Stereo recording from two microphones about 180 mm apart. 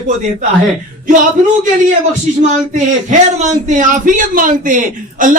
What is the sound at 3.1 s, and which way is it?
A man's voice, 45° right (ahead or behind).